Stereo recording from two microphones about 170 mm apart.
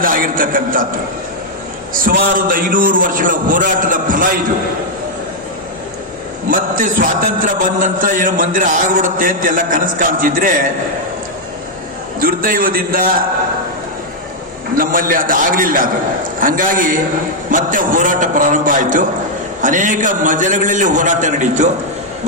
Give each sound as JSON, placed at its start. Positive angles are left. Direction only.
{"t": 0.0, "sound": "a man's voice", "side_deg": -55}
{"t": 1.9, "sound": "music", "side_deg": -55}
{"t": 6.5, "sound": "music", "side_deg": -55}
{"t": 12.2, "sound": "a man's voice", "side_deg": -55}
{"t": 14.8, "sound": "a man's voice", "side_deg": -55}
{"t": 16.4, "sound": "music", "side_deg": -55}